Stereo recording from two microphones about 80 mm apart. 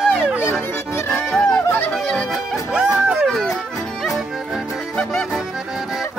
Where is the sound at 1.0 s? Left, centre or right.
Left.